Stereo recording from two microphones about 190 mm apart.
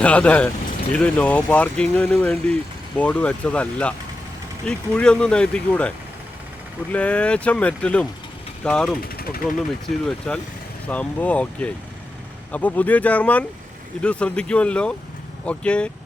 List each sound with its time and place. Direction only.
0.0 s speech: 5° left (ahead or behind)
6.9 s speech: 5° left (ahead or behind)
9.0 s speech: 50° left (ahead or behind)
10.1 s speech: 5° left (ahead or behind)